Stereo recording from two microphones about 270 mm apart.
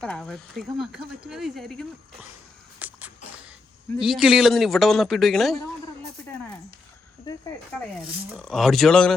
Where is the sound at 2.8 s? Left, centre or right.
Centre.